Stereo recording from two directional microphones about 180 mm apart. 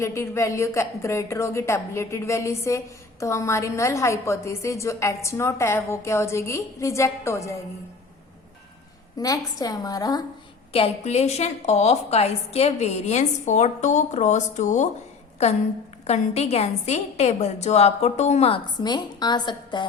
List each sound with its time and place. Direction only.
0.0 s a woman's voice: 15° left (ahead or behind)
9.1 s a woman's voice: 20° left (ahead or behind)
10.7 s a woman's voice: 35° left (ahead or behind)
16.0 s a woman's voice: 40° left (ahead or behind)